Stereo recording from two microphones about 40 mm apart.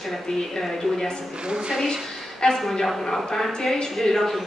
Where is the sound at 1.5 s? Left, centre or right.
Centre.